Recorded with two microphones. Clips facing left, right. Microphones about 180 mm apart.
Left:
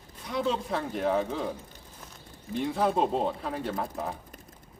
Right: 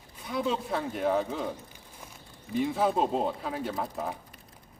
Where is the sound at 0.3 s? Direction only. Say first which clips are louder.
Left 1 dB; centre (ahead or behind).